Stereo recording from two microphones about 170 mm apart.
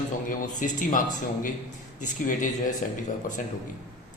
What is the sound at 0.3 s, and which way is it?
A man's voice, 50° left (ahead or behind).